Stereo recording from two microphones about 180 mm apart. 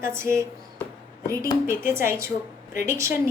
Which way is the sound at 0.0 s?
15° right (ahead or behind).